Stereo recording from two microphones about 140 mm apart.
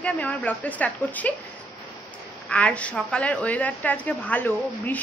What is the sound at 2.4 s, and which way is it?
A woman's voice, 10° left (ahead or behind).